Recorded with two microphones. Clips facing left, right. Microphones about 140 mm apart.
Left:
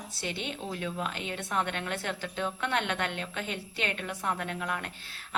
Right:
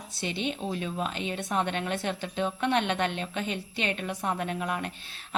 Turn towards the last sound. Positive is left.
turn(degrees=-20)  # may be behind; listen again after turning